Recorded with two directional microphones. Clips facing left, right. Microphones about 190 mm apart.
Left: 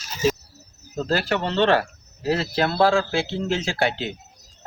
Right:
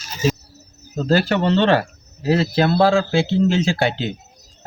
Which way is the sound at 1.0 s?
25° right (ahead or behind).